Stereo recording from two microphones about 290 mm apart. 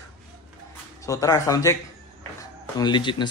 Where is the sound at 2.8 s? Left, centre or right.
Centre.